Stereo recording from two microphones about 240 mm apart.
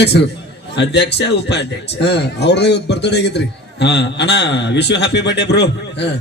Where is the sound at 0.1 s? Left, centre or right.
Left.